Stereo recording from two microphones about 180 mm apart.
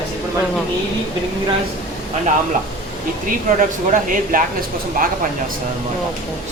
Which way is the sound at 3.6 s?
50° right (ahead or behind).